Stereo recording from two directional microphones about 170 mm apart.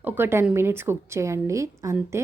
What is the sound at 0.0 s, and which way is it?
A woman's voice, 10° right (ahead or behind).